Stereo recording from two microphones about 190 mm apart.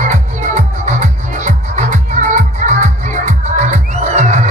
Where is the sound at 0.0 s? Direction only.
40° right (ahead or behind).